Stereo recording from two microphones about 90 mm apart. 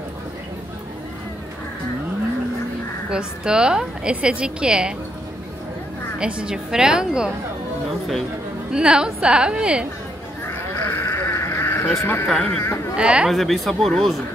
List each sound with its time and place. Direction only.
3.1 s a woman's voice: 10° right (ahead or behind)
6.1 s a woman's voice: 10° right (ahead or behind)
8.7 s a woman's voice: 10° right (ahead or behind)
10.9 s sheep: 30° left (ahead or behind)
12.0 s speech: 30° left (ahead or behind)
12.3 s speech: 10° left (ahead or behind)
12.5 s speech: 30° left (ahead or behind)
12.9 s a woman's voice: 10° right (ahead or behind)
13.3 s speech: centre (ahead or behind)